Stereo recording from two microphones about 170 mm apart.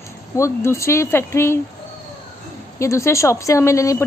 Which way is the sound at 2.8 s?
15° left (ahead or behind).